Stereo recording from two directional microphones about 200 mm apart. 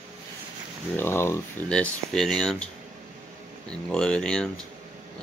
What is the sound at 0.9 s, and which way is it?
Speech, 10° left (ahead or behind).